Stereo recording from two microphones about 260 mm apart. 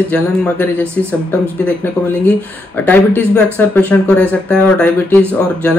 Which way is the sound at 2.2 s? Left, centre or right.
Centre.